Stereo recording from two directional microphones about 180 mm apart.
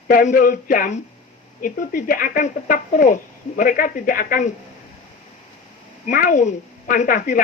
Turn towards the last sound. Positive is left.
turn(degrees=50)  # may be behind; listen again after turning